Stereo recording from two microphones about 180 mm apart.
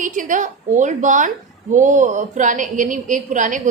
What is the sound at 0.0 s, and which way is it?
A woman's voice, 45° right (ahead or behind).